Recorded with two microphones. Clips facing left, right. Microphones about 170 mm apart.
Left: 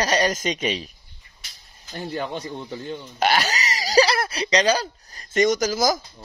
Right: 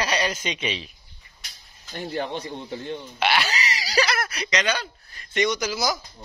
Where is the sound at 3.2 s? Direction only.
40° left (ahead or behind).